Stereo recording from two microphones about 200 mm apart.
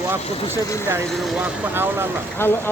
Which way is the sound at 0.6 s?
15° left (ahead or behind).